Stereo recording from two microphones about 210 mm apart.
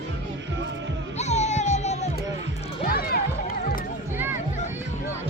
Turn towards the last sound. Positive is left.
turn(degrees=45)  # may be behind; listen again after turning